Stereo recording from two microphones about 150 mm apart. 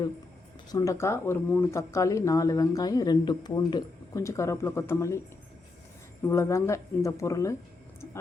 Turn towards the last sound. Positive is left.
turn(degrees=20)  # may be behind; listen again after turning